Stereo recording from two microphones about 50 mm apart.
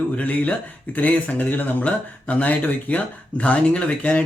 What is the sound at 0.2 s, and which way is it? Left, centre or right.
Speech, left.